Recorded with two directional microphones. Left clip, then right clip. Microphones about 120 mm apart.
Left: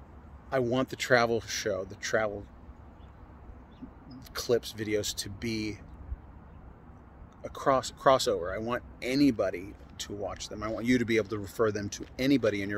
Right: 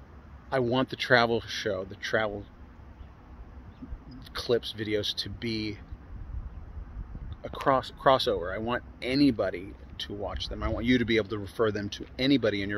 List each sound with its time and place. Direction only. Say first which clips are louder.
0.5 s speech: right 2 dB; 25° right (ahead or behind)
4.3 s speech: right 1 dB; 15° right (ahead or behind)
7.4 s speech: right 1 dB; 15° right (ahead or behind)